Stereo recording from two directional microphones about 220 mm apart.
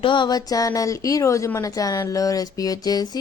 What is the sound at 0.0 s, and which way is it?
A woman's voice, 20° left (ahead or behind).